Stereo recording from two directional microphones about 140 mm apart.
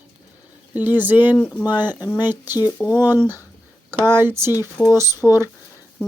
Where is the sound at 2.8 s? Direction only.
15° left (ahead or behind).